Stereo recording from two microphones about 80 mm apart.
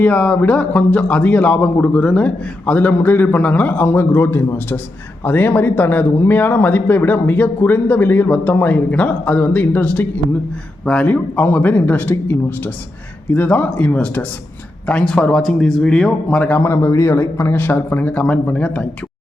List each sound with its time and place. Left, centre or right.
0.0 s speech: centre
16.4 s speech: left
16.6 s speech: left; by 18.9 s centre